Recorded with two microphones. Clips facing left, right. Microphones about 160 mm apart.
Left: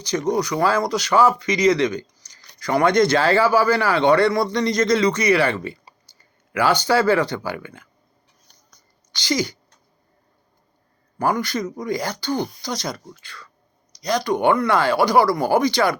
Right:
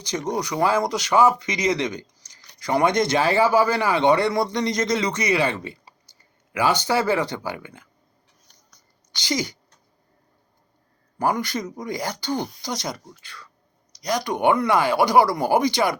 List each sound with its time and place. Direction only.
0.0 s speech: 20° right (ahead or behind)
9.1 s speech: 20° right (ahead or behind)
11.2 s speech: 20° right (ahead or behind)